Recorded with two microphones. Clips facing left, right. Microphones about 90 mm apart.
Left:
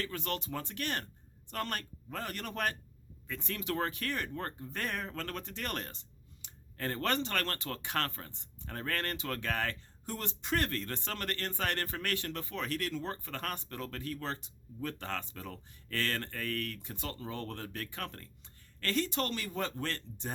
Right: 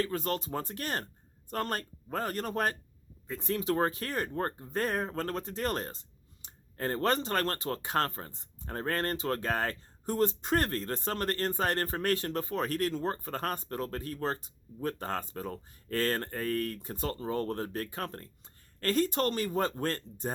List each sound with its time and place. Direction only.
0.0 s speech: 35° right (ahead or behind)